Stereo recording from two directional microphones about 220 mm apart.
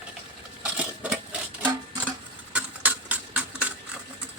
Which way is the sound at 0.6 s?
5° right (ahead or behind).